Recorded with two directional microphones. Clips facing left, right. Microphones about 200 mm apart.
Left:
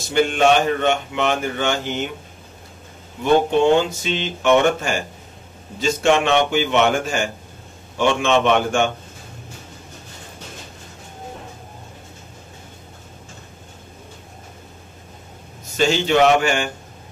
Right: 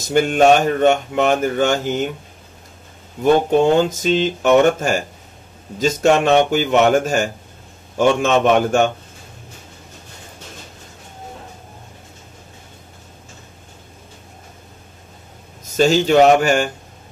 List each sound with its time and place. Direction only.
0.1 s speech: 45° right (ahead or behind)
3.4 s a man's voice: 45° right (ahead or behind)
15.6 s speech: 45° right (ahead or behind)